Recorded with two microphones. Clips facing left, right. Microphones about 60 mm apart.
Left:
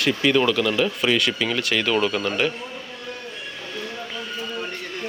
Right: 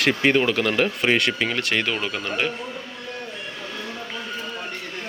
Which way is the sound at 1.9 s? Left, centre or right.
Centre.